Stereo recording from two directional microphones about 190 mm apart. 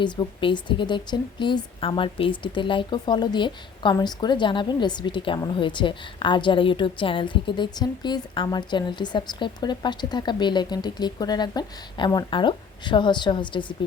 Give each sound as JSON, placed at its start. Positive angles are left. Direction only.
{"t": 0.0, "sound": "speech", "side_deg": 25}